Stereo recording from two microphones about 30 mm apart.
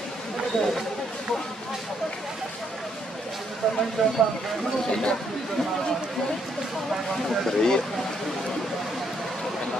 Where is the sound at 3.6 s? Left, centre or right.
Left.